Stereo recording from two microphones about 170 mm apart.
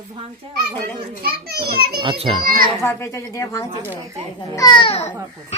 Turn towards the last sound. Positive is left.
turn(degrees=30)  # may be behind; listen again after turning